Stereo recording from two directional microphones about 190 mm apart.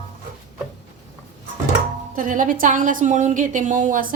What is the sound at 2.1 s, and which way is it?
A woman's voice, 45° right (ahead or behind).